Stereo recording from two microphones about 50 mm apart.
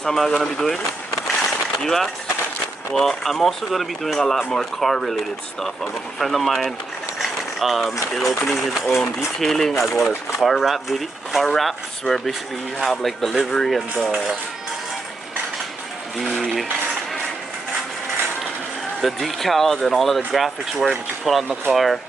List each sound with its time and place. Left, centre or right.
0.0 s speech: centre
1.8 s speech: centre
11.4 s speech: centre
16.3 s speech: centre
18.9 s speech: centre
21.2 s speech: centre